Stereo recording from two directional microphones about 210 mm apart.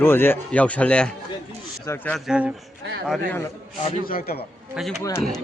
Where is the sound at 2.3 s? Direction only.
5° right (ahead or behind).